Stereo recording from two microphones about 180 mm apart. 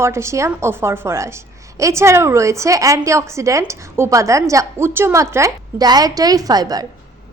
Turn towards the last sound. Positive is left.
turn(degrees=-20)  # may be behind; listen again after turning